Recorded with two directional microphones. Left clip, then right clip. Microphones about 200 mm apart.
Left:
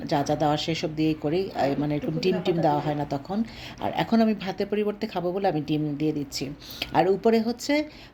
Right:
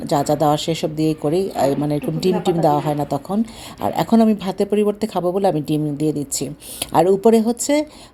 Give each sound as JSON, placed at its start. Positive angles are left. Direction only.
{"t": 0.0, "sound": "speech", "side_deg": -40}